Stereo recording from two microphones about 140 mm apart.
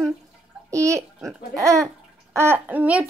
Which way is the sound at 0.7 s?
20° right (ahead or behind).